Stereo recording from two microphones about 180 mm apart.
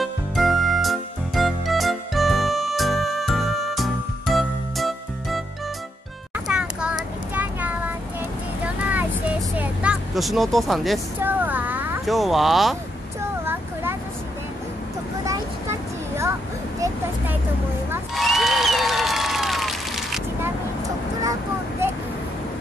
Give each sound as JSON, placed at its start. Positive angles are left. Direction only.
{"t": 0.0, "sound": "music", "side_deg": 0}
{"t": 6.3, "sound": "child singing", "side_deg": -5}
{"t": 8.6, "sound": "vehicle", "side_deg": -10}
{"t": 11.1, "sound": "a sound", "side_deg": -10}
{"t": 12.1, "sound": "speech", "side_deg": 0}
{"t": 13.2, "sound": "vehicle", "side_deg": -15}
{"t": 18.1, "sound": "applause", "side_deg": 0}
{"t": 21.2, "sound": "a sound", "side_deg": -20}